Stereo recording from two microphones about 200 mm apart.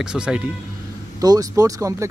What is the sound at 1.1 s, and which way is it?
Speech, 20° right (ahead or behind).